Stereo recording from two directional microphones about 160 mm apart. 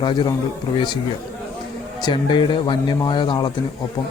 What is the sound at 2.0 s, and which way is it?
A man's voice, 30° left (ahead or behind).